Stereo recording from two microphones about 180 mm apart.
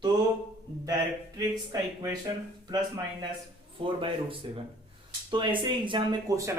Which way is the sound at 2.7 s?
20° right (ahead or behind).